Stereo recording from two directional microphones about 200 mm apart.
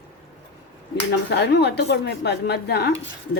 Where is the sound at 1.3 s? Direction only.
60° left (ahead or behind).